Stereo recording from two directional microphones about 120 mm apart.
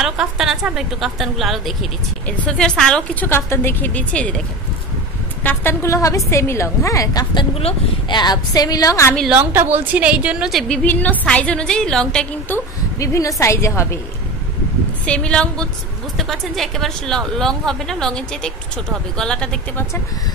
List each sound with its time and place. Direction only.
0.0 s a woman's voice: 5° right (ahead or behind)
2.2 s a woman's voice: 10° left (ahead or behind)
3.3 s a woman's voice: 20° left (ahead or behind)
5.4 s a woman's voice: 15° left (ahead or behind)
7.3 s speech: 55° left (ahead or behind)
8.1 s a woman's voice: 35° left (ahead or behind)
9.3 s a woman's voice: 20° right (ahead or behind)
10.7 s a woman's voice: 10° left (ahead or behind)
12.5 s a woman's voice: 25° left (ahead or behind)
15.0 s a woman's voice: 10° left (ahead or behind)